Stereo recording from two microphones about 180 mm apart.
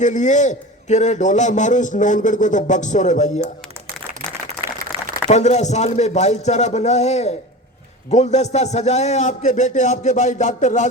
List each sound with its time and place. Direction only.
0.0 s a man's voice: 40° left (ahead or behind)
4.9 s crumpling: 30° right (ahead or behind)
5.3 s a man's voice: 40° left (ahead or behind)